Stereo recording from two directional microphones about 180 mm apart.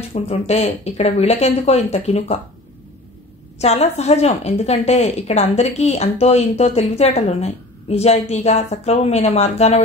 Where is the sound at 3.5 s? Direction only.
35° left (ahead or behind).